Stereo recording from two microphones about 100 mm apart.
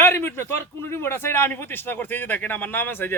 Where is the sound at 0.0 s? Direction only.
20° left (ahead or behind).